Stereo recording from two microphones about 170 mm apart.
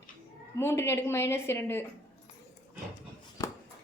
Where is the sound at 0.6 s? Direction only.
15° left (ahead or behind).